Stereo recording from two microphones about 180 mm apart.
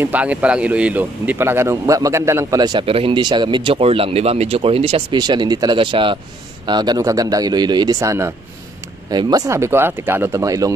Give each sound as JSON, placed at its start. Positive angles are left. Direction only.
{"t": 0.0, "sound": "a man's voice", "side_deg": -10}